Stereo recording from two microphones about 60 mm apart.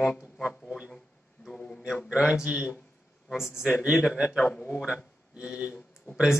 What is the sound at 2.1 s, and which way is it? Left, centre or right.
Speech, centre.